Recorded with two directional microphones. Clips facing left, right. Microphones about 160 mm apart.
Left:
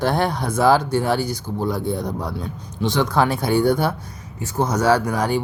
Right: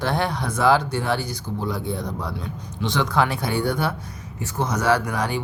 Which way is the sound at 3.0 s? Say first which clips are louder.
Left 2 dB; 40° left (ahead or behind).